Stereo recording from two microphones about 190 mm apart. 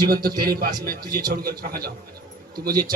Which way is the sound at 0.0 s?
50° right (ahead or behind).